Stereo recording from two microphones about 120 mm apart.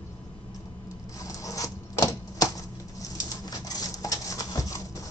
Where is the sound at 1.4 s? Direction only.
30° left (ahead or behind).